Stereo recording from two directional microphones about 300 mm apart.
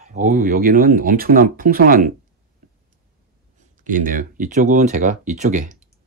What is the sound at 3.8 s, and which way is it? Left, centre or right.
Speech, right.